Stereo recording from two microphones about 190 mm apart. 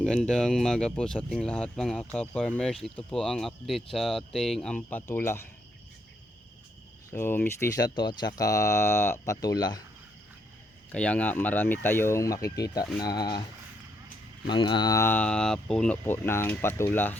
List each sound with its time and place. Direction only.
0.0 s speech: centre (ahead or behind)
7.1 s speech: 10° left (ahead or behind)
10.9 s speech: 5° left (ahead or behind)
14.4 s speech: 25° left (ahead or behind)